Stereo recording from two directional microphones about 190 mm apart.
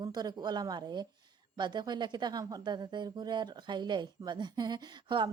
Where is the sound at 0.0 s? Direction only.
20° right (ahead or behind).